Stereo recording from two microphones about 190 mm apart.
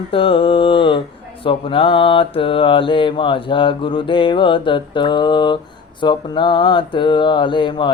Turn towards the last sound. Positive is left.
turn(degrees=25)  # may be behind; listen again after turning